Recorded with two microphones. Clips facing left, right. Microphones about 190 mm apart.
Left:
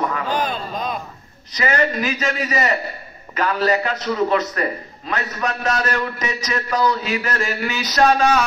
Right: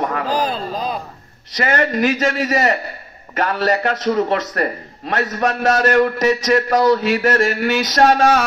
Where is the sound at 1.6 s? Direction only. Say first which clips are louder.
Right 3 dB; 50° right (ahead or behind).